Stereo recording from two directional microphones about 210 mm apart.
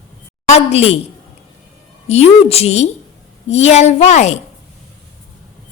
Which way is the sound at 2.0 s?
30° left (ahead or behind).